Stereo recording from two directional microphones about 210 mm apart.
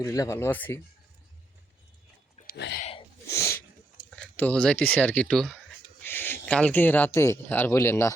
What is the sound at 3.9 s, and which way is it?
Speech, 5° left (ahead or behind).